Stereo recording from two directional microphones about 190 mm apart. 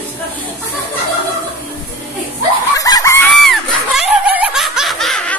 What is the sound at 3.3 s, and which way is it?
Snicker, centre (ahead or behind).